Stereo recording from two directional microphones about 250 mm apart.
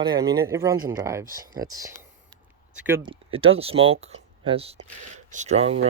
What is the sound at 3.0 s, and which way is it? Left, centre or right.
Speech, right.